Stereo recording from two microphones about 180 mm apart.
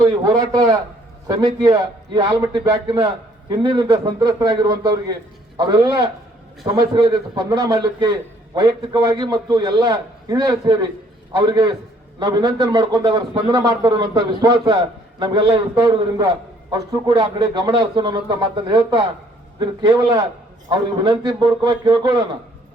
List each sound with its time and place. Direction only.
0.0 s a man's voice: 20° right (ahead or behind)